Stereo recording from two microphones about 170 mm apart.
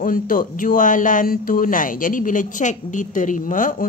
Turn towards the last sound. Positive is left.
turn(degrees=50)  # may be behind; listen again after turning